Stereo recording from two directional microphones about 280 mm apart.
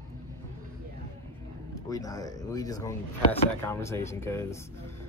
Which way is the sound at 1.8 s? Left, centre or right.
Centre.